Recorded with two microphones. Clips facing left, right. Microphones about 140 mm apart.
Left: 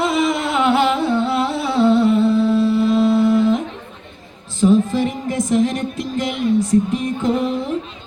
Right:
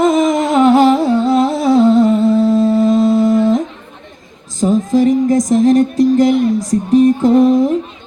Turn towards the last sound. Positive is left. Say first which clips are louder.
# right 10 dB
turn(degrees=-40)  # may be behind; listen again after turning